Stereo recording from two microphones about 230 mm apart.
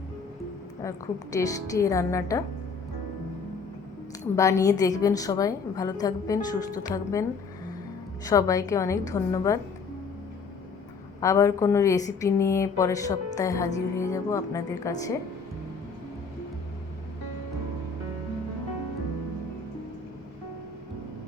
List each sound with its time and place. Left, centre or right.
0.8 s a woman's voice: centre
4.4 s a woman's voice: centre
11.2 s a woman's voice: centre